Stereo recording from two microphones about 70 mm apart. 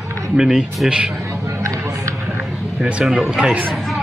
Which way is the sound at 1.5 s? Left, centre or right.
Right.